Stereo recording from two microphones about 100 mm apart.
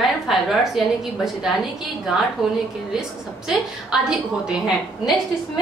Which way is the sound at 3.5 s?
5° right (ahead or behind).